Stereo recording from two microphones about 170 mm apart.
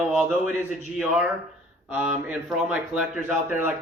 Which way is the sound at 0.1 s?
5° right (ahead or behind).